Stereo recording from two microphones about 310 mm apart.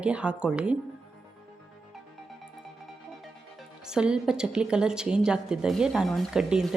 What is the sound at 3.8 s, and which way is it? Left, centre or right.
A woman's voice, centre.